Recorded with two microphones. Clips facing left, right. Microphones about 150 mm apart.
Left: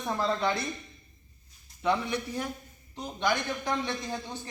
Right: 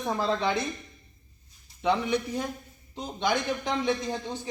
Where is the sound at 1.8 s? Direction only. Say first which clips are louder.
Right 3 dB; 15° right (ahead or behind).